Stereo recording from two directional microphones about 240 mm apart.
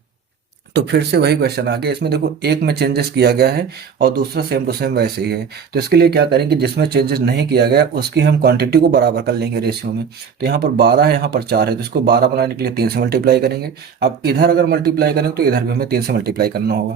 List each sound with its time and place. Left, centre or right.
0.7 s speech: right